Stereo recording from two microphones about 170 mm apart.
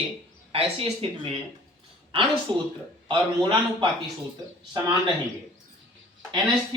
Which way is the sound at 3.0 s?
25° right (ahead or behind).